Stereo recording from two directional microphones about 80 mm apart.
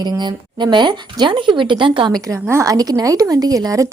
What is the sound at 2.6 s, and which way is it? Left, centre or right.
Speech, right.